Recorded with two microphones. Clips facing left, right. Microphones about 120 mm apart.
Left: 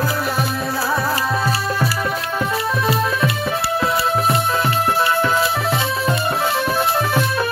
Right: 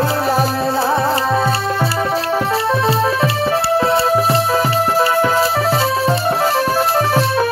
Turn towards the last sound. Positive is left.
turn(degrees=-35)  # may be behind; listen again after turning